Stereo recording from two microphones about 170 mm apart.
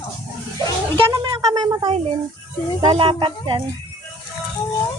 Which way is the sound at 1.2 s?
25° right (ahead or behind).